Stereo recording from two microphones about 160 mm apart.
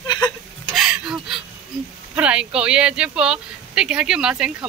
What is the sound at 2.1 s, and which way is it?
Speech, 5° right (ahead or behind).